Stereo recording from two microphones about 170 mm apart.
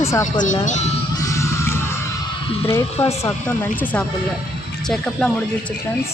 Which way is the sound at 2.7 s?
15° left (ahead or behind).